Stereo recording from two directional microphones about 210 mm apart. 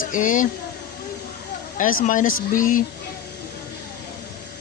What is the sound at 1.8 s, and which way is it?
Speech, 40° left (ahead or behind).